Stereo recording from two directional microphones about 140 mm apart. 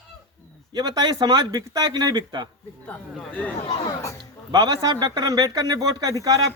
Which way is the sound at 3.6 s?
40° left (ahead or behind).